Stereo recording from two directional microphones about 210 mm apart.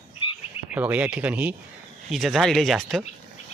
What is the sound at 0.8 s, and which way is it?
Speech, 5° right (ahead or behind).